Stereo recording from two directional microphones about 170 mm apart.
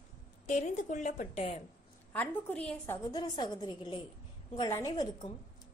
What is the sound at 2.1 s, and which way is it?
Speech, 10° left (ahead or behind).